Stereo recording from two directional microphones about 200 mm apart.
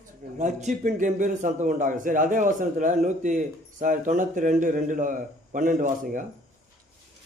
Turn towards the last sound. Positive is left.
turn(degrees=-40)  # may be behind; listen again after turning